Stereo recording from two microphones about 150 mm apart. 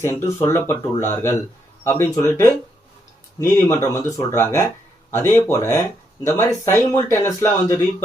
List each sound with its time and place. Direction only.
0.0 s speech: 15° left (ahead or behind)